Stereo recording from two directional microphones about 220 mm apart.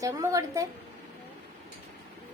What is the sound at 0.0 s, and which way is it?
Speech, 15° right (ahead or behind).